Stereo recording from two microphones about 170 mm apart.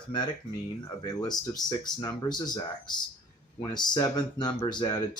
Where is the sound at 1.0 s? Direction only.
25° left (ahead or behind).